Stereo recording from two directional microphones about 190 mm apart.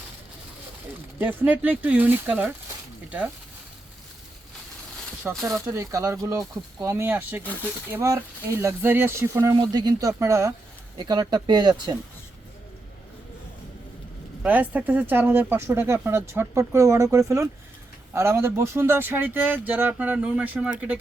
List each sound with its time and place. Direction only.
1.2 s speech: 10° right (ahead or behind)
5.2 s speech: 10° right (ahead or behind)
14.4 s speech: 10° right (ahead or behind)